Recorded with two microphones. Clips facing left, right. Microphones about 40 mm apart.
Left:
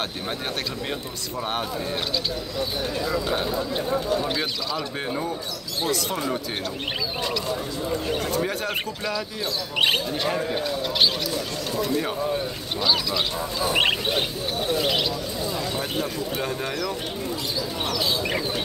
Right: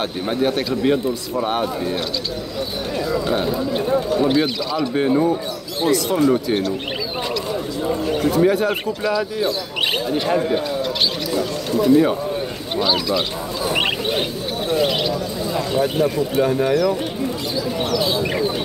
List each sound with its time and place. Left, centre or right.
0.0 s speech: centre
4.2 s speech: centre
8.4 s speech: centre
13.7 s bird: centre
15.8 s speech: centre